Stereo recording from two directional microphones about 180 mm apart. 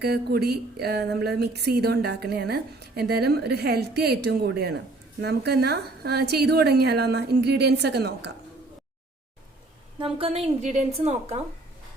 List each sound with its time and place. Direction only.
0.0 s a woman's voice: 60° right (ahead or behind)
10.0 s a woman's voice: 30° right (ahead or behind)